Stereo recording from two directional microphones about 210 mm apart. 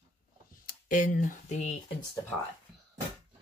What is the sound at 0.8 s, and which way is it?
Speech, 40° left (ahead or behind).